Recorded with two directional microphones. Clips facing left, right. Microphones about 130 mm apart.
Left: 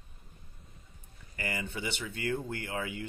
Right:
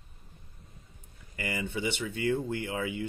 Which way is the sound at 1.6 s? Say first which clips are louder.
Right 5 dB; 20° right (ahead or behind).